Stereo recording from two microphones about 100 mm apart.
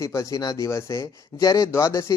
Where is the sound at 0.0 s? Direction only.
30° left (ahead or behind).